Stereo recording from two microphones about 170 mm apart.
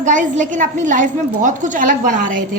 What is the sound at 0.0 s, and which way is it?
A woman's voice, 45° right (ahead or behind).